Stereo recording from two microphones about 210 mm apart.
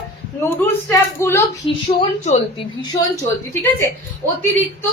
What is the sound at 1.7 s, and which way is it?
Speech, 25° left (ahead or behind).